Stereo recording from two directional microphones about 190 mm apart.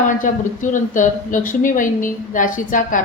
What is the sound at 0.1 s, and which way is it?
A woman's voice, 45° left (ahead or behind).